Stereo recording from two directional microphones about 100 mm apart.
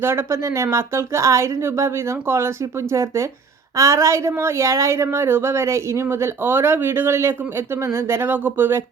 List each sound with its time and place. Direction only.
0.0 s a woman's voice: 25° right (ahead or behind)